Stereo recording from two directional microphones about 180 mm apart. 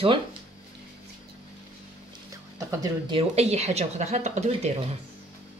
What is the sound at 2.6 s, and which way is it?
Speech, 20° right (ahead or behind).